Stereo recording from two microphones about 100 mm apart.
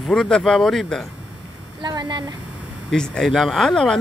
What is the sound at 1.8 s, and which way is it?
Speech, 45° right (ahead or behind).